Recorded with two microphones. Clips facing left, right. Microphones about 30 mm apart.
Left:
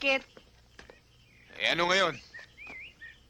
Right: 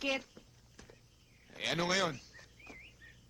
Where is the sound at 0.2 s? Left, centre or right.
Left.